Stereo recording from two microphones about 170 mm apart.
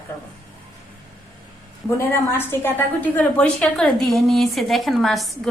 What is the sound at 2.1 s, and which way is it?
A woman's voice, 15° left (ahead or behind).